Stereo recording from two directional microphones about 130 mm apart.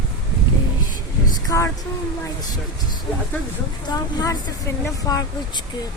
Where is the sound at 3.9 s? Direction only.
30° left (ahead or behind).